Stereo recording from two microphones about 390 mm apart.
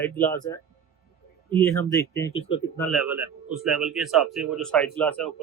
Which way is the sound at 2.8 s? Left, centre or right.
Centre.